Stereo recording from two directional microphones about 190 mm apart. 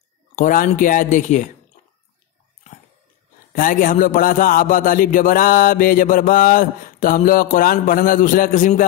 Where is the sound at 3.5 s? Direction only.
45° left (ahead or behind).